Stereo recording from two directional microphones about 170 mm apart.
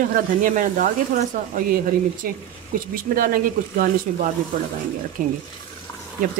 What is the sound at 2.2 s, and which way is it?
Speech, 55° right (ahead or behind).